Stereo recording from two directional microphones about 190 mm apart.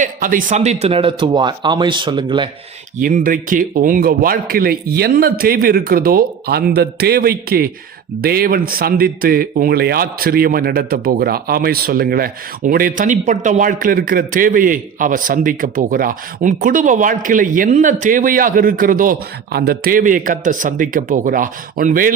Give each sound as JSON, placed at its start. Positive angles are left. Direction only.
{"t": 0.0, "sound": "speech", "side_deg": -45}
{"t": 3.0, "sound": "speech", "side_deg": -45}